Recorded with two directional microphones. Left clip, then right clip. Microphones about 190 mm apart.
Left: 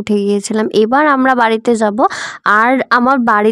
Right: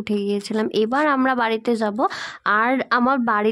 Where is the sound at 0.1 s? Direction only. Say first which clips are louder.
Left 9 dB; 45° left (ahead or behind).